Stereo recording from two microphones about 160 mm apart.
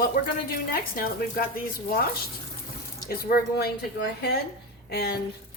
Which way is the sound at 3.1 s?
80° left.